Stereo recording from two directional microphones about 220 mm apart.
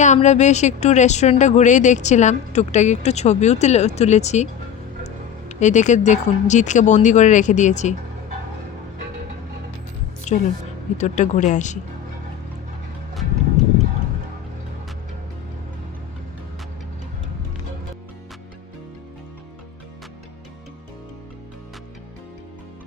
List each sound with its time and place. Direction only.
0.0 s speech: 35° left (ahead or behind)
10.3 s a woman's voice: 30° left (ahead or behind)